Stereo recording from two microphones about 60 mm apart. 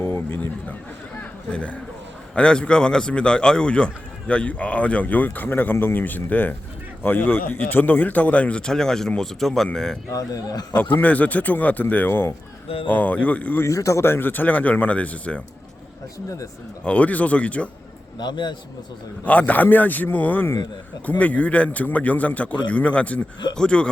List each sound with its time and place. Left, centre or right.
0.0 s a sound: left
1.2 s a sound: centre
2.3 s speech: centre
10.1 s a man's voice: left
11.0 s speech: left
13.7 s speech: left
14.0 s speech: left; by 15.4 s centre
16.8 s speech: left
19.2 s speech: left